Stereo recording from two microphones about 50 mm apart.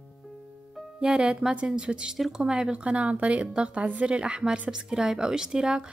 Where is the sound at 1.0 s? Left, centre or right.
Centre.